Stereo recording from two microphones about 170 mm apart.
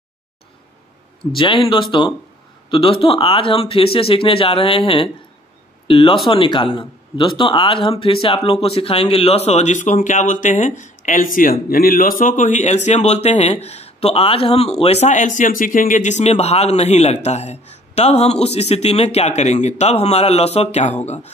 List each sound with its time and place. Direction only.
1.3 s speech: 30° left (ahead or behind)